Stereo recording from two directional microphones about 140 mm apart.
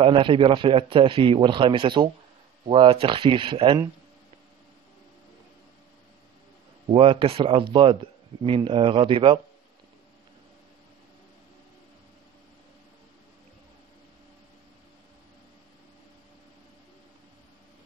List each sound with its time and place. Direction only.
0.0 s speech: 40° right (ahead or behind)
6.9 s speech: 40° right (ahead or behind)